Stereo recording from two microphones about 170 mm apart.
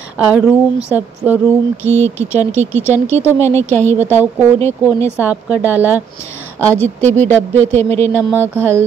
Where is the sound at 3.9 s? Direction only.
15° right (ahead or behind).